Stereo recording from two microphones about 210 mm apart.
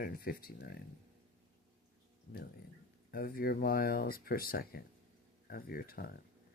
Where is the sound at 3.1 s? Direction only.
45° left (ahead or behind).